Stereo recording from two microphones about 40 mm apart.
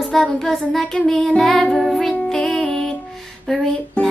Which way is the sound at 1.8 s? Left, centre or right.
Centre.